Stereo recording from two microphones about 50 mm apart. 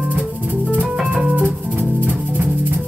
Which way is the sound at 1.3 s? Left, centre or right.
Right.